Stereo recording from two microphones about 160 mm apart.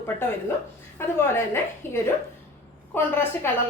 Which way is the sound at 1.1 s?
15° left (ahead or behind).